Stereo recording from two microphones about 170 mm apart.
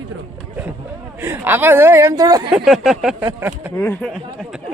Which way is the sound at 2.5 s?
Centre (ahead or behind).